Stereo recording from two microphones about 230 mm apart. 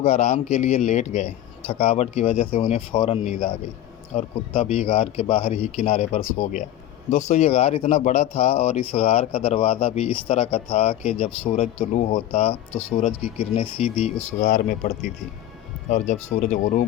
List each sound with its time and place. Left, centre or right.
0.0 s speech: left